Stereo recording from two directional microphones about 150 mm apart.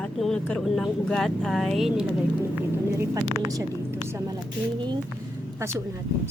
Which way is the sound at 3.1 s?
25° right (ahead or behind).